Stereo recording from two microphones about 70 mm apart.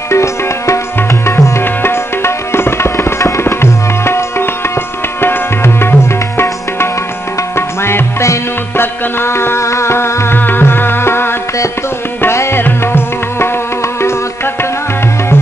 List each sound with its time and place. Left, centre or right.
0.1 s music: left
1.2 s tabla: left
4.0 s music: left
5.2 s tabla: left
7.5 s music: left